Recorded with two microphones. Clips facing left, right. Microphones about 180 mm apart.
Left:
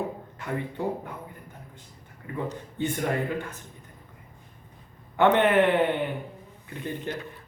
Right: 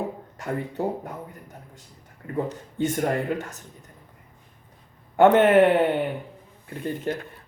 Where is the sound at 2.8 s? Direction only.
45° right (ahead or behind).